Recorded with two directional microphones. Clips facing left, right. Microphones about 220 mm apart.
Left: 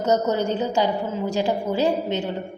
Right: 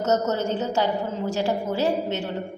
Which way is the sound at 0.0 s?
15° left (ahead or behind).